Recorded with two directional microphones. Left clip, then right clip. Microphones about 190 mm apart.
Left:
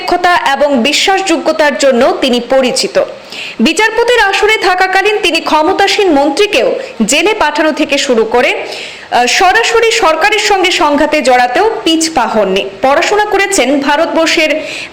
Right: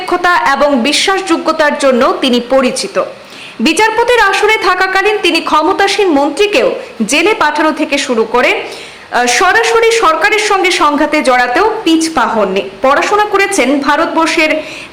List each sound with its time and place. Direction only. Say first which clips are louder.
0.1 s a man's voice: left 1 dB; 15° left (ahead or behind)